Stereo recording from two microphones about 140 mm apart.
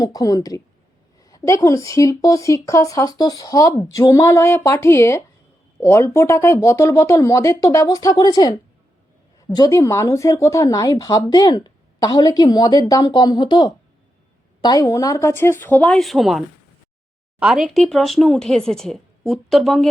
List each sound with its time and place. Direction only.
0.0 s speech: 25° left (ahead or behind)
9.6 s speech: 25° left (ahead or behind)
15.9 s speech: centre (ahead or behind)
17.4 s speech: centre (ahead or behind)